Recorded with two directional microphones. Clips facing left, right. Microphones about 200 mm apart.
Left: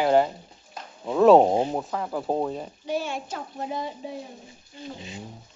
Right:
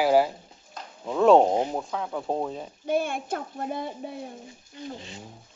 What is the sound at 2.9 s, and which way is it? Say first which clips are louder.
A child's voice: right 3 dB; 55° right (ahead or behind).